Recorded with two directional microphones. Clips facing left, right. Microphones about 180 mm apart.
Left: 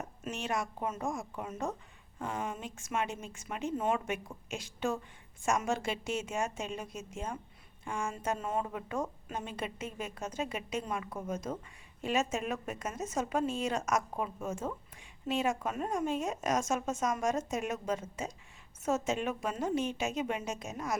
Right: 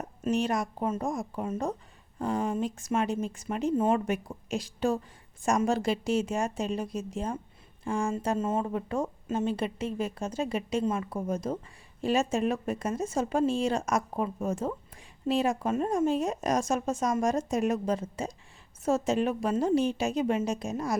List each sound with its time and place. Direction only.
0.3 s a woman's voice: 35° right (ahead or behind)